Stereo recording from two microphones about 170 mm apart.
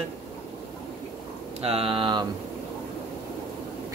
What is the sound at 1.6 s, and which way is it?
Speech, 35° right (ahead or behind).